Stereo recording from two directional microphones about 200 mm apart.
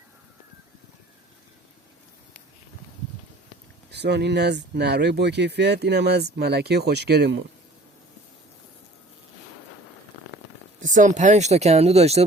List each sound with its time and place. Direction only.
3.9 s speech: 55° right (ahead or behind)
10.8 s speech: 40° right (ahead or behind)